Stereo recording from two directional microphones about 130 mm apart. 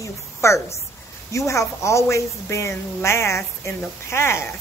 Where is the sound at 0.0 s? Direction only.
20° left (ahead or behind).